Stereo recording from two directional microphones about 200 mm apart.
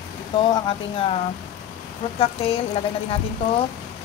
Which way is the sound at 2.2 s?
30° left (ahead or behind).